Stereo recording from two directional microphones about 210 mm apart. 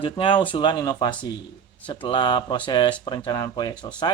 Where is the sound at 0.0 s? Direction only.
25° left (ahead or behind).